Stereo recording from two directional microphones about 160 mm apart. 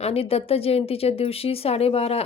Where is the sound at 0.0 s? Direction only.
40° left (ahead or behind).